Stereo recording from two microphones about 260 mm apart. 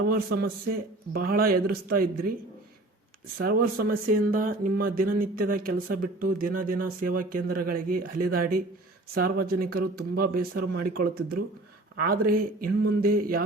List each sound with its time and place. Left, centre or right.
0.1 s speech: right
3.4 s speech: right